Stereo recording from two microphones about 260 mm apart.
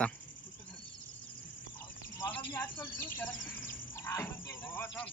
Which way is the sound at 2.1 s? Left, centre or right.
Centre.